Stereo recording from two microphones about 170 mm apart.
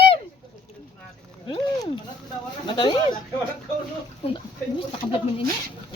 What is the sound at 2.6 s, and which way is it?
Speech, 25° left (ahead or behind).